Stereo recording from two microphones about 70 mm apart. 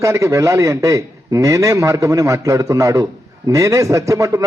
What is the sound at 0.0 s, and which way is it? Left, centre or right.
A man's voice, right.